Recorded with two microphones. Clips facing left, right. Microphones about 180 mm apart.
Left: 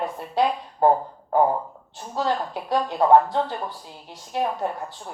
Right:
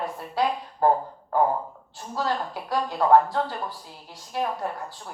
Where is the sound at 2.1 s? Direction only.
20° left (ahead or behind).